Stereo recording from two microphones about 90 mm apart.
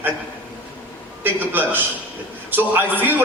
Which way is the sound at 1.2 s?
20° right (ahead or behind).